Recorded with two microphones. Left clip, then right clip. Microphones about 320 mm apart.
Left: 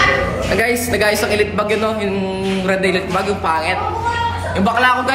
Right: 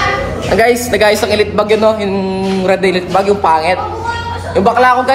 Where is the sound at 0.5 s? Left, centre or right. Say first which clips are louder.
Right 8 dB; centre.